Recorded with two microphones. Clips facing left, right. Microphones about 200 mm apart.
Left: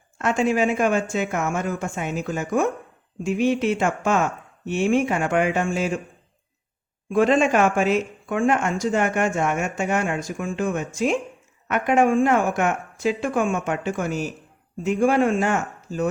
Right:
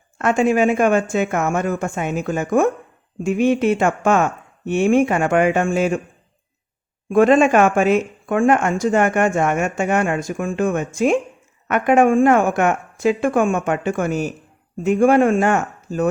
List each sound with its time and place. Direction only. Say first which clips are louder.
0.2 s speech: right 4 dB; 55° right (ahead or behind)
7.1 s speech: right 5 dB; 50° right (ahead or behind)